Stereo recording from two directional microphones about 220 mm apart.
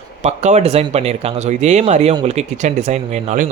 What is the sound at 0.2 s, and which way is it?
Speech, 30° right (ahead or behind).